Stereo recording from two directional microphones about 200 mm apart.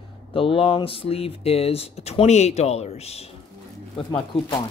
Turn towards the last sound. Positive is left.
turn(degrees=25)  # may be behind; listen again after turning